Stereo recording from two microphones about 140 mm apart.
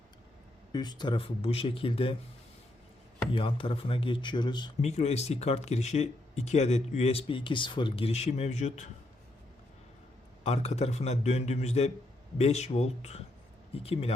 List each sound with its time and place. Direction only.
0.7 s speech: 30° left (ahead or behind)
3.3 s speech: 40° left (ahead or behind)
4.8 s speech: 50° left (ahead or behind)
10.4 s speech: 50° left (ahead or behind)